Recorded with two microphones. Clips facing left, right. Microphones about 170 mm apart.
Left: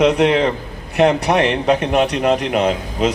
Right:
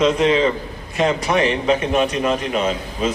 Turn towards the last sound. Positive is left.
turn(degrees=70)  # may be behind; listen again after turning